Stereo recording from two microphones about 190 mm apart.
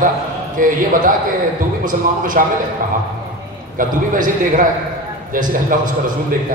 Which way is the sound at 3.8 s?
45° right (ahead or behind).